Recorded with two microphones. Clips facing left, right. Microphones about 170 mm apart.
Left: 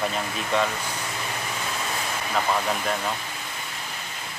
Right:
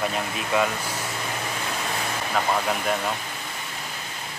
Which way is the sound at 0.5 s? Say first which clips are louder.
Right 1 dB; 5° right (ahead or behind).